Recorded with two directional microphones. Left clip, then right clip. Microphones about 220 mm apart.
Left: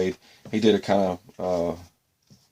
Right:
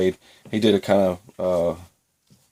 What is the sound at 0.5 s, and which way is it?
Speech, 35° right (ahead or behind).